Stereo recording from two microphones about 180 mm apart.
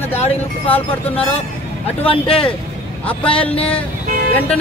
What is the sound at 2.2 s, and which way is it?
Speech, 5° left (ahead or behind).